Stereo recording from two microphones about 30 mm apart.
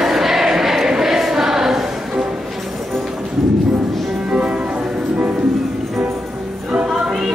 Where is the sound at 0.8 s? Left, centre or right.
Centre.